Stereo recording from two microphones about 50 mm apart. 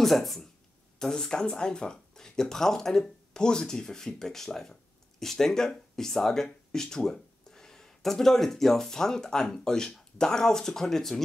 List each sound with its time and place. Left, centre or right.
0.0 s speech: centre